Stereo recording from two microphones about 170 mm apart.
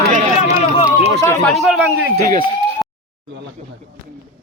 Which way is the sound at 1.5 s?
Centre (ahead or behind).